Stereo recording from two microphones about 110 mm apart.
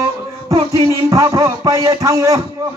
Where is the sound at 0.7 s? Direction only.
30° right (ahead or behind).